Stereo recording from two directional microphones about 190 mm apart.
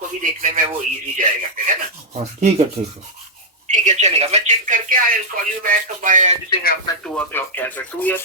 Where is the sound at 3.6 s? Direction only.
40° right (ahead or behind).